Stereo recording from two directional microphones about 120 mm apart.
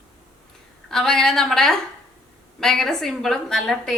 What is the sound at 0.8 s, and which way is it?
A woman's voice, 5° left (ahead or behind).